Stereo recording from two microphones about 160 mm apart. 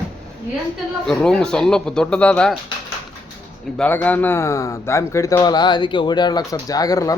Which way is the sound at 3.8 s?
10° left (ahead or behind).